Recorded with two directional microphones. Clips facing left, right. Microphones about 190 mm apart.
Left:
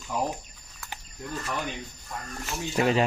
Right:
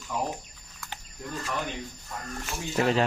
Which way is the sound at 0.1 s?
15° left (ahead or behind).